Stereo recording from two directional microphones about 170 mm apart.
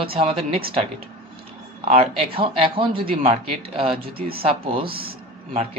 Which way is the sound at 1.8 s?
35° right (ahead or behind).